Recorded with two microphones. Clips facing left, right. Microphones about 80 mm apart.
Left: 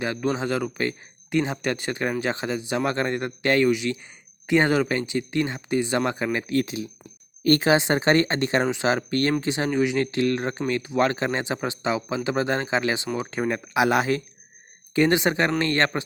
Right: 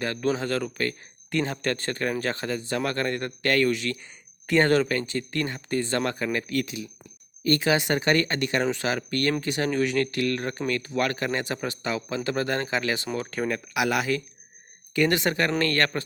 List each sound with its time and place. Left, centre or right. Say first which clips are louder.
0.0 s speech: left 1 dB; centre